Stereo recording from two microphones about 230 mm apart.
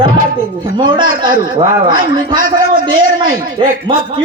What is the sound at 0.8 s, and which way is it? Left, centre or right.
A man's voice, centre.